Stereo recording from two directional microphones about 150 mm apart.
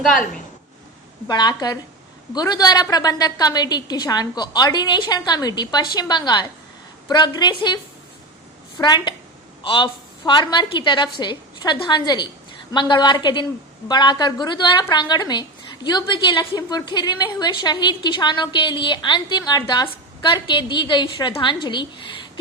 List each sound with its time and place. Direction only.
0.0 s a woman's voice: centre (ahead or behind)
1.3 s a woman's voice: 30° left (ahead or behind)
8.8 s a woman's voice: 30° left (ahead or behind)